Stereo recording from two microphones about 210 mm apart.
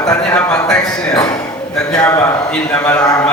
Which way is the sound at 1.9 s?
5° left (ahead or behind).